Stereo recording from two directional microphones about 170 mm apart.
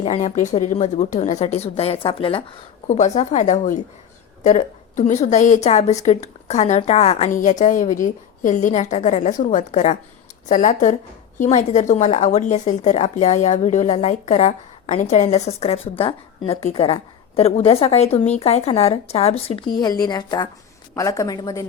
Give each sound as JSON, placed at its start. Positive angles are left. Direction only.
{"t": 0.0, "sound": "a woman's voice", "side_deg": 35}